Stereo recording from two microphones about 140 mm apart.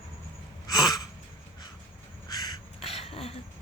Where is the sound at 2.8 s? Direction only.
45° left (ahead or behind).